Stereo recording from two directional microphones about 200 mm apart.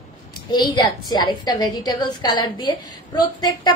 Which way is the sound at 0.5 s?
20° left (ahead or behind).